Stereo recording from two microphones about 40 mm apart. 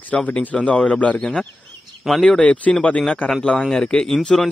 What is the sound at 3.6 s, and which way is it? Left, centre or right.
Speech, centre.